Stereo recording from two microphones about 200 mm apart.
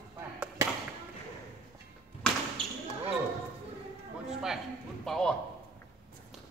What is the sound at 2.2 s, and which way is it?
Basketball bounce, 5° left (ahead or behind).